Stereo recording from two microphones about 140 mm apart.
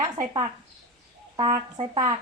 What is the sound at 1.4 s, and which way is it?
Speech, 30° right (ahead or behind).